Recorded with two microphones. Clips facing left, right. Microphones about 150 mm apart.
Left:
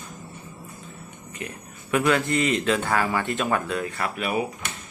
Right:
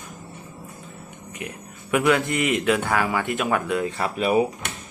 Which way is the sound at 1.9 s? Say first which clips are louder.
Right 1 dB; 15° right (ahead or behind).